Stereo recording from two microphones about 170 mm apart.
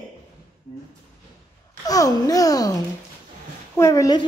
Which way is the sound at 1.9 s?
20° left (ahead or behind).